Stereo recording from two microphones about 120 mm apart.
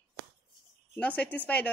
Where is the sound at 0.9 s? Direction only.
10° left (ahead or behind).